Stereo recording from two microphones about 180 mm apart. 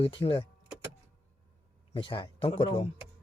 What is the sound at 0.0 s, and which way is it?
Speech, 30° left (ahead or behind).